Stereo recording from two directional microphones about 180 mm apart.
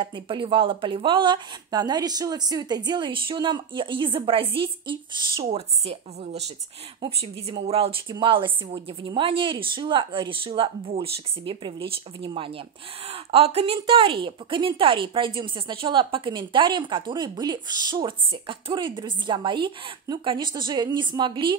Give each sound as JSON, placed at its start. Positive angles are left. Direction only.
{"t": 0.0, "sound": "a woman's voice", "side_deg": -25}
{"t": 7.0, "sound": "a woman's voice", "side_deg": -35}